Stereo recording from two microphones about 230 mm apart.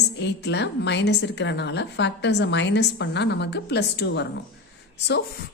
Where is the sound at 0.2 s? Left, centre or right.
Left.